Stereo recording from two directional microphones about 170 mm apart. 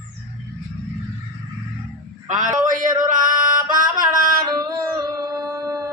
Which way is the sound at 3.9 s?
55° right (ahead or behind).